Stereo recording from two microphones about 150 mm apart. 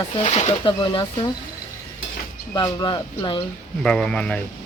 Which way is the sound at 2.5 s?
30° left (ahead or behind).